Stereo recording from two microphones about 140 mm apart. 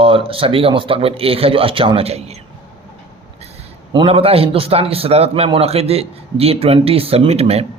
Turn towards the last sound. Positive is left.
turn(degrees=-45)  # may be behind; listen again after turning